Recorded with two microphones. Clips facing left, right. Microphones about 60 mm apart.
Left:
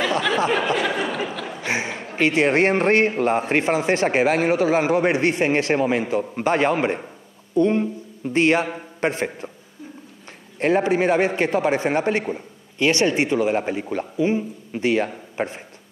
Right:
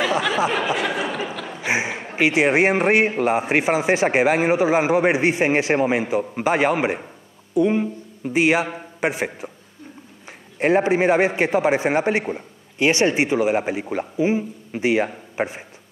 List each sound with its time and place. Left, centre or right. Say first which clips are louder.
0.0 s a sound: even; centre
0.7 s snicker: left 1 dB; centre
1.6 s a man's voice: right 3 dB; centre
10.6 s a man's voice: right 1 dB; centre